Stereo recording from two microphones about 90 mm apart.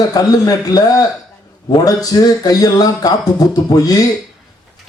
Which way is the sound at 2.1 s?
55° left (ahead or behind).